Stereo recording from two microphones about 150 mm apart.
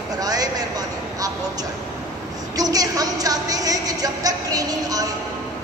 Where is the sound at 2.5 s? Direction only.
25° right (ahead or behind).